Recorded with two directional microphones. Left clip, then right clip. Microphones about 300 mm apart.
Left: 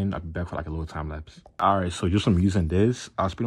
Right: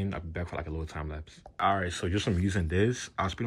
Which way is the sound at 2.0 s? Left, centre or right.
Left.